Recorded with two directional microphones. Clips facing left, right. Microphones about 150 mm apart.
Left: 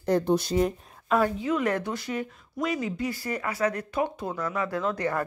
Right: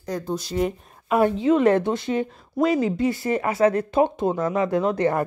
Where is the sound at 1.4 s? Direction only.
25° right (ahead or behind).